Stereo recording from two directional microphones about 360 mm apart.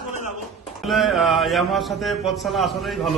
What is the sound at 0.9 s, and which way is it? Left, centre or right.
A man's voice, centre.